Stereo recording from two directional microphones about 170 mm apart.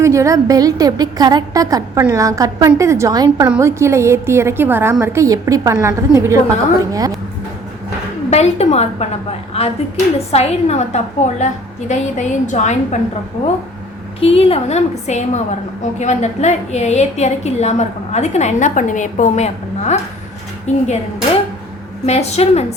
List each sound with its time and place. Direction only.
0.0 s a woman's voice: 20° right (ahead or behind)
3.4 s a woman's voice: 10° right (ahead or behind)
8.3 s a woman's voice: 40° left (ahead or behind)
14.2 s a woman's voice: 35° left (ahead or behind)
22.0 s a woman's voice: 40° left (ahead or behind)